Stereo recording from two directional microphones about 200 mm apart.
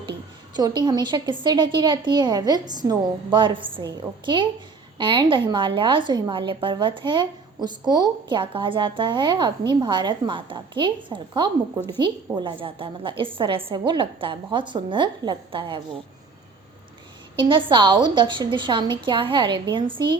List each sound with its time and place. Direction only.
0.5 s a woman's voice: 20° right (ahead or behind)
17.3 s a woman's voice: 25° right (ahead or behind)